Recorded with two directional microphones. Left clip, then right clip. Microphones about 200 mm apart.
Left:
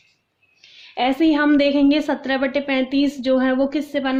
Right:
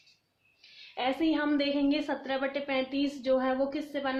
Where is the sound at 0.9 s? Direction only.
55° left (ahead or behind).